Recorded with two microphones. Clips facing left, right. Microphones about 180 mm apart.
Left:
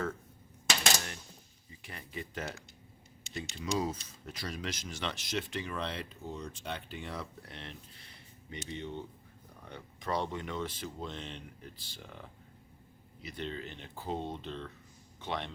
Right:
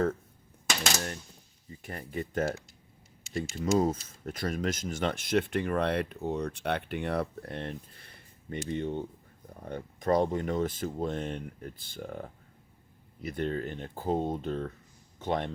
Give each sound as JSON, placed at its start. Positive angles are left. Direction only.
{"t": 1.8, "sound": "speech", "side_deg": -45}
{"t": 3.5, "sound": "speech", "side_deg": -50}